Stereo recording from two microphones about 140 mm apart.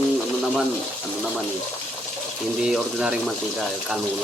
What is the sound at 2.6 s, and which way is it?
Speech, 5° right (ahead or behind).